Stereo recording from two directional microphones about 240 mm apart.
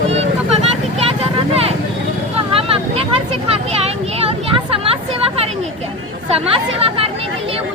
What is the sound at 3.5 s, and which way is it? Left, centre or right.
Speech, right.